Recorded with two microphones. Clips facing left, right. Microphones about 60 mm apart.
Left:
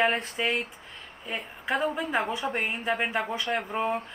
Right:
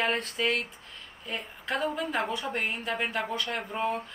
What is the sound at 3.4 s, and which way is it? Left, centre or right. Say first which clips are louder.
Speech: left 4 dB; centre.